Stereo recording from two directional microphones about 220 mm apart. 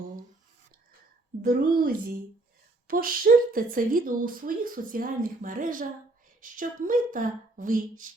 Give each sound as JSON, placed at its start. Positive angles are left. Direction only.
{"t": 1.4, "sound": "a woman's voice", "side_deg": -40}